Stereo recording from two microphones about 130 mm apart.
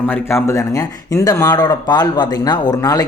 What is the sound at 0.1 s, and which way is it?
Speech, 20° left (ahead or behind).